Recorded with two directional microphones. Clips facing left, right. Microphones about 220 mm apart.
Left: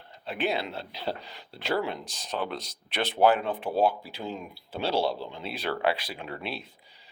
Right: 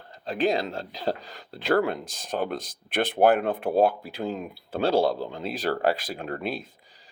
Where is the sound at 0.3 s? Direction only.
40° right (ahead or behind).